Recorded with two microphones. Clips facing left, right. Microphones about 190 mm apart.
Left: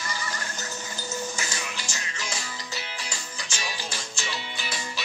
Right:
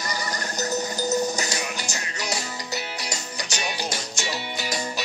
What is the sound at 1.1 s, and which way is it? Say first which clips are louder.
Music: right 7 dB; 40° right (ahead or behind).